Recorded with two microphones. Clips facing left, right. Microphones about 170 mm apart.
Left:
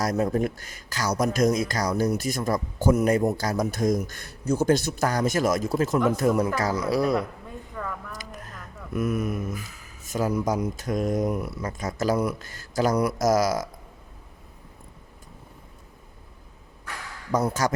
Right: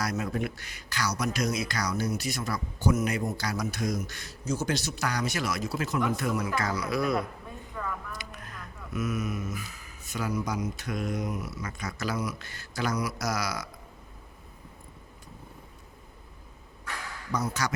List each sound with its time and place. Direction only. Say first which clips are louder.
0.0 s speech: left 7 dB; 40° left (ahead or behind)
8.1 s a sound: left 2 dB; 40° left (ahead or behind)
8.9 s speech: left 5 dB; 55° left (ahead or behind)
10.1 s speech: left 6 dB; 45° left (ahead or behind)
11.6 s speech: left 7 dB; 45° left (ahead or behind)
17.3 s speech: left 7 dB; 45° left (ahead or behind)